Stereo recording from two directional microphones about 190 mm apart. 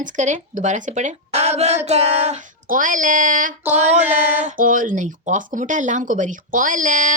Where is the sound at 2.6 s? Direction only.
45° right (ahead or behind).